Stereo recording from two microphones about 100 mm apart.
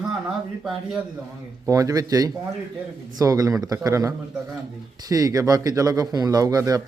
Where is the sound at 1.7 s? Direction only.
35° right (ahead or behind).